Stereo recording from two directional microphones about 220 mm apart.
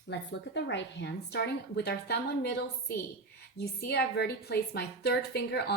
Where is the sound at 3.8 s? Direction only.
45° left (ahead or behind).